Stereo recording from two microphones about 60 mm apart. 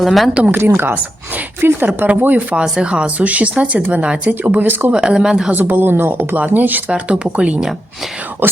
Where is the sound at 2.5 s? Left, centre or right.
Centre; by 4.9 s right.